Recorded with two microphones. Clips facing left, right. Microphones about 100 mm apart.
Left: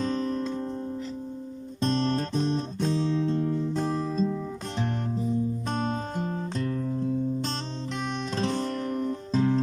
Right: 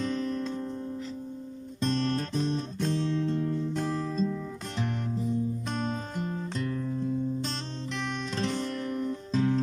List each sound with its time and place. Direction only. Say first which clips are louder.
0.0 s music: left 2 dB; 30° left (ahead or behind)
1.8 s music: left 3 dB; 30° left (ahead or behind)
6.6 s music: left 3 dB; 40° left (ahead or behind)
7.9 s music: left 2 dB; 20° left (ahead or behind)
8.4 s music: left 3 dB; 35° left (ahead or behind)